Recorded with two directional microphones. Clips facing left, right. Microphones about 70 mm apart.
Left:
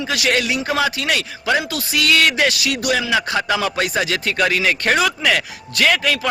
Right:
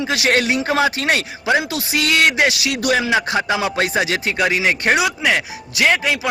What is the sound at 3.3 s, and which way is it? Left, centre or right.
A man's voice, right.